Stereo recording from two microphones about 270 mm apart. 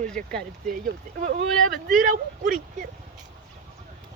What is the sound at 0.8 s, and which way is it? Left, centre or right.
Speech, right.